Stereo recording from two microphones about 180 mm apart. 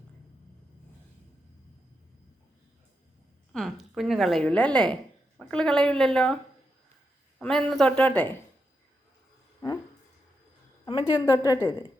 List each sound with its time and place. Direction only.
3.5 s a woman's voice: centre (ahead or behind)
7.3 s a woman's voice: centre (ahead or behind)
10.8 s a sound: 30° left (ahead or behind)
11.3 s a woman's voice: 20° left (ahead or behind)